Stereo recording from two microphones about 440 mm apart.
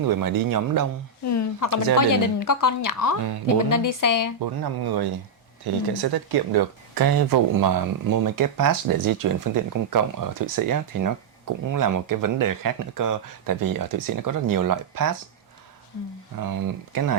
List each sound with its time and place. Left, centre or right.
0.0 s speech: right
1.2 s a sound: left
2.0 s a woman's voice: left
4.4 s speech: right
16.4 s speech: right